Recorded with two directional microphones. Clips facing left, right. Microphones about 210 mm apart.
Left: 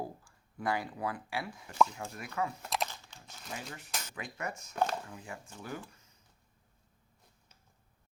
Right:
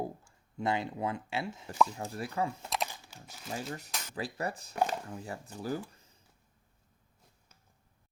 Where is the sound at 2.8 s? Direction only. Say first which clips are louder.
Right 1 dB; 10° right (ahead or behind).